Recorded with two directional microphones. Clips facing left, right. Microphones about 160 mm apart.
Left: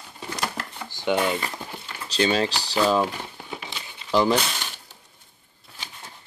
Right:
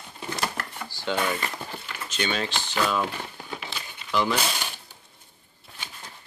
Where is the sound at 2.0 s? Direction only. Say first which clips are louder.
Left 7 dB; 35° left (ahead or behind).